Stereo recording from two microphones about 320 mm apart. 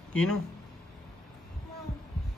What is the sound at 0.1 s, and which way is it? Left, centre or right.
Speech, centre.